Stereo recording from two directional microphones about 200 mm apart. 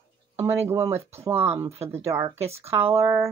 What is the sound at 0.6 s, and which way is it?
Speech, 15° right (ahead or behind).